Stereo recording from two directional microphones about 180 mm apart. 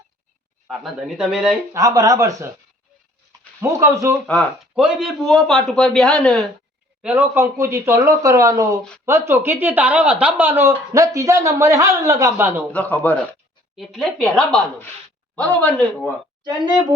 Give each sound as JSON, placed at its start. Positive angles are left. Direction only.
{"t": 0.7, "sound": "a man's voice", "side_deg": 0}
{"t": 1.7, "sound": "speech", "side_deg": -20}
{"t": 3.6, "sound": "speech", "side_deg": -15}
{"t": 4.3, "sound": "a man's voice", "side_deg": 5}
{"t": 4.7, "sound": "a man's voice", "side_deg": -5}
{"t": 7.0, "sound": "speech", "side_deg": -10}
{"t": 12.7, "sound": "a man's voice", "side_deg": 10}